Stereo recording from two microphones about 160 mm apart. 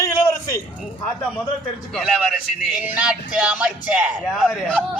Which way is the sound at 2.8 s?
5° right (ahead or behind).